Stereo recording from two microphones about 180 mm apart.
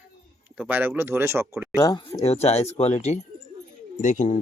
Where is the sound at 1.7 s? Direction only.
20° left (ahead or behind).